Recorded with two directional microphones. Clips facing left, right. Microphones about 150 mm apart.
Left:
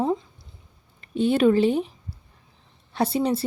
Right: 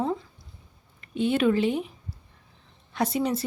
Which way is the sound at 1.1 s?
35° left (ahead or behind).